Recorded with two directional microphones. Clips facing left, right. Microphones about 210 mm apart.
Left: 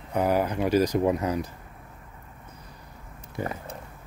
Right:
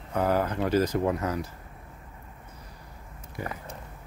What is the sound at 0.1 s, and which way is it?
Speech, 15° left (ahead or behind).